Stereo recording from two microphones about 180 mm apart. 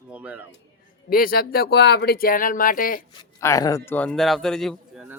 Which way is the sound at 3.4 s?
15° left (ahead or behind).